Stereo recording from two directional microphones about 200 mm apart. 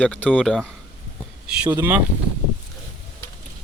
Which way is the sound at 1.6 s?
20° right (ahead or behind).